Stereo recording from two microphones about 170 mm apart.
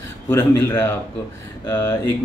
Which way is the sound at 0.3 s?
20° left (ahead or behind).